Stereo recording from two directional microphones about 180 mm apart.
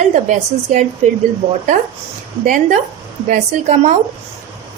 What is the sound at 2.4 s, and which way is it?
A woman's voice, 45° right (ahead or behind).